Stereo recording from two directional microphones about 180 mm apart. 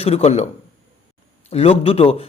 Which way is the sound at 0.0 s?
35° left (ahead or behind).